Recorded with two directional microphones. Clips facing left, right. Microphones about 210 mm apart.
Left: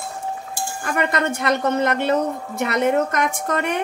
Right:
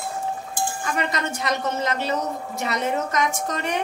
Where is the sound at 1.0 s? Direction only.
55° left (ahead or behind).